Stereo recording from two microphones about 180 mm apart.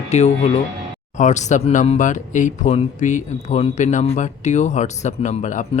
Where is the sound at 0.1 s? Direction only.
35° left (ahead or behind).